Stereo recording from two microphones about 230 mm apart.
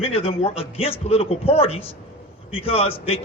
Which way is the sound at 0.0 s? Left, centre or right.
Left.